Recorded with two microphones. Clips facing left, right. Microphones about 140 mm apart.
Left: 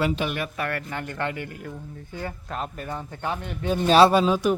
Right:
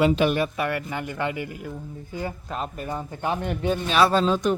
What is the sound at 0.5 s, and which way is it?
Speech, 15° right (ahead or behind).